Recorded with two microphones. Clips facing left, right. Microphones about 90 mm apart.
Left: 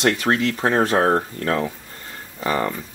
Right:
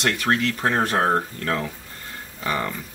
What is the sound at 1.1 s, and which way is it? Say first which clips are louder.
Speech: left 3 dB; 15° left (ahead or behind).